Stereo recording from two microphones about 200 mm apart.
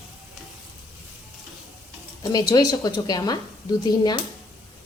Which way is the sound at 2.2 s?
20° left (ahead or behind).